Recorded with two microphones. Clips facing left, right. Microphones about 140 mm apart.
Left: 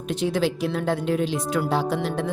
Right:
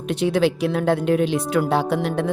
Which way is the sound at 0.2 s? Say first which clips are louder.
Right 4 dB; 65° right (ahead or behind).